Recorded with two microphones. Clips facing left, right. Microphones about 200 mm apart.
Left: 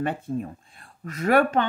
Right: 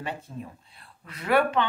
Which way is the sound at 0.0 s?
50° left (ahead or behind).